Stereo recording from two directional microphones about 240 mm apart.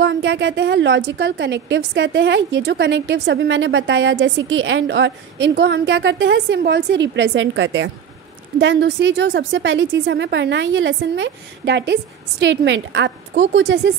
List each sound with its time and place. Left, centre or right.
0.0 s a woman's voice: right